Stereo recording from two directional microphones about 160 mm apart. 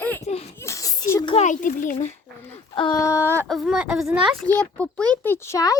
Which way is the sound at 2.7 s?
30° left (ahead or behind).